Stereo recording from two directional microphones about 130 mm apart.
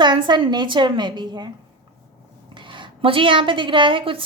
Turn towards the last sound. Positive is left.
turn(degrees=-40)  # may be behind; listen again after turning